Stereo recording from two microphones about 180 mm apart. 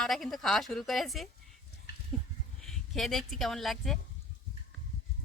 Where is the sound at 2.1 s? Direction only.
5° left (ahead or behind).